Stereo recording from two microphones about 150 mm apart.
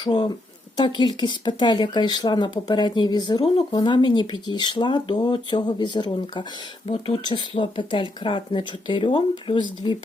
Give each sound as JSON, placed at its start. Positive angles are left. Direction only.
{"t": 0.0, "sound": "speech", "side_deg": 30}